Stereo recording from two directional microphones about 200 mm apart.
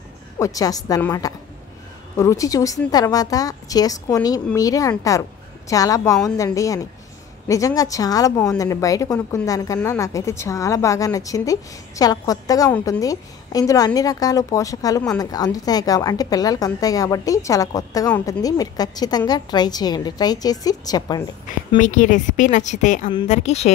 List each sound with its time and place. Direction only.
0.4 s a woman's voice: 15° left (ahead or behind)
21.7 s a woman's voice: 40° left (ahead or behind)